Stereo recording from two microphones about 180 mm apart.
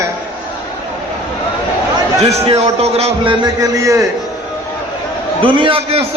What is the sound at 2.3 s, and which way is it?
A man's voice, 35° right (ahead or behind).